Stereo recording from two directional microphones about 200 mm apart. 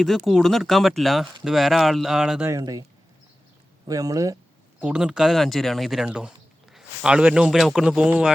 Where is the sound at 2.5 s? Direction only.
20° right (ahead or behind).